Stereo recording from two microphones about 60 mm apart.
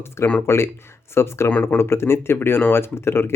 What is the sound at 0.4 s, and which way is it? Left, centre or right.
Speech, left.